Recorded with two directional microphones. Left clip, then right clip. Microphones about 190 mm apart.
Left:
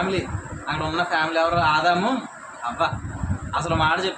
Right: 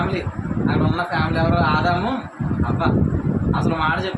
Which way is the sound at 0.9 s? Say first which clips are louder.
Left 1 dB; 5° left (ahead or behind).